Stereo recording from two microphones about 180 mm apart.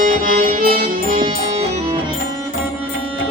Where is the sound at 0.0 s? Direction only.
50° right (ahead or behind).